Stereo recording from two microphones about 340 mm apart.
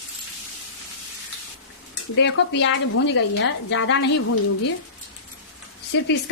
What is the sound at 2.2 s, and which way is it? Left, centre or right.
A woman's voice, left.